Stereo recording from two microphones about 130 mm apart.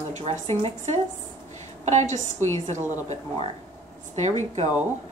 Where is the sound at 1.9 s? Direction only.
65° right (ahead or behind).